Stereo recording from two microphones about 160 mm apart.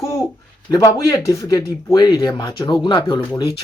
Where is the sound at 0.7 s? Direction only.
20° left (ahead or behind).